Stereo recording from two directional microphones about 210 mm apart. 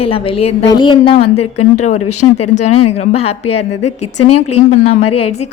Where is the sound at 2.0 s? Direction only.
90° left.